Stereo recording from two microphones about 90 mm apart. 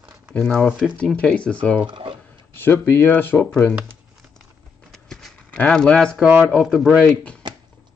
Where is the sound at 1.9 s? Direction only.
65° right (ahead or behind).